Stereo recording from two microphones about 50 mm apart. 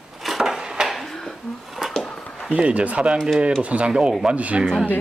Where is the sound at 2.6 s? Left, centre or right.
Right.